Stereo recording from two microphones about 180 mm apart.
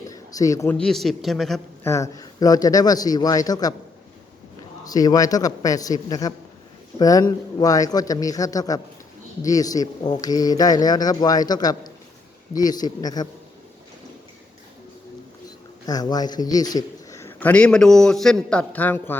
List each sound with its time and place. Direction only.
0.1 s a man's voice: 20° left (ahead or behind)
0.8 s a man's voice: centre (ahead or behind)
1.8 s a man's voice: 15° left (ahead or behind)
4.8 s a man's voice: 20° left (ahead or behind)
15.9 s a man's voice: 20° left (ahead or behind)